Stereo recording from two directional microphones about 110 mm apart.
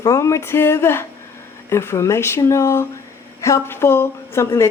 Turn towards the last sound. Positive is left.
turn(degrees=25)  # may be behind; listen again after turning